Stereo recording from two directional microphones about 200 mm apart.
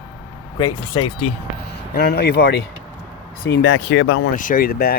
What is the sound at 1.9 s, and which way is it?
Speech, 50° left (ahead or behind).